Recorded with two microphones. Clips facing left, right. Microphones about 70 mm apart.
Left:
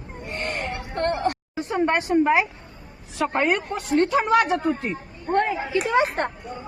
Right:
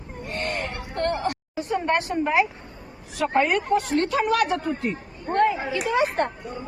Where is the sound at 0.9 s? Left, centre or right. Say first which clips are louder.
Left 1 dB; left.